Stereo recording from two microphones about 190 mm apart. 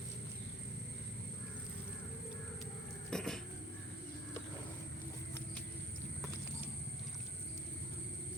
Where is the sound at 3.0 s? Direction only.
5° left (ahead or behind).